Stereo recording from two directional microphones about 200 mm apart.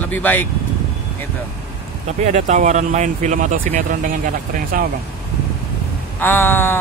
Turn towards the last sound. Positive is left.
turn(degrees=10)  # may be behind; listen again after turning